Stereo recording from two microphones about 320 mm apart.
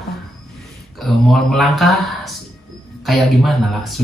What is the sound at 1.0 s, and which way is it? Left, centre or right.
Speech, centre.